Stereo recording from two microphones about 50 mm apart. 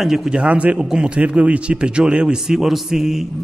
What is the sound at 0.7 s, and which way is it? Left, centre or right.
Speech, centre.